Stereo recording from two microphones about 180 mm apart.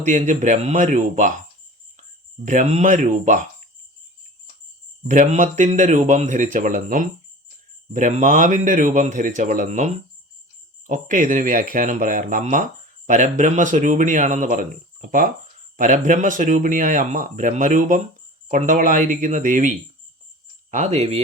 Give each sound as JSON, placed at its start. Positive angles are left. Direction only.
{"t": 0.0, "sound": "speech", "side_deg": -45}
{"t": 5.0, "sound": "speech", "side_deg": -40}